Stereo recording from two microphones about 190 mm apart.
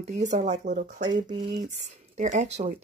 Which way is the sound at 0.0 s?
40° right (ahead or behind).